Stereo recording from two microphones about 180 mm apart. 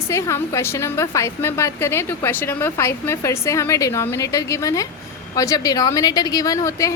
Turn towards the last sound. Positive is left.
turn(degrees=15)  # may be behind; listen again after turning